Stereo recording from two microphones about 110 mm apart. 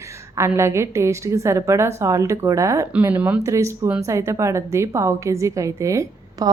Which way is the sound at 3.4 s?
25° right (ahead or behind).